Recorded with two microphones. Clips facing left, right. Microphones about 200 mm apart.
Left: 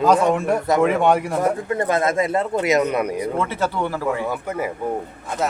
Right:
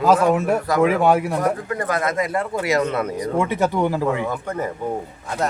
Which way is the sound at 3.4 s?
15° right (ahead or behind).